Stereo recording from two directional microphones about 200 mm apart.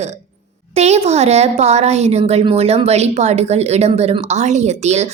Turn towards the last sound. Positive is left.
turn(degrees=-35)  # may be behind; listen again after turning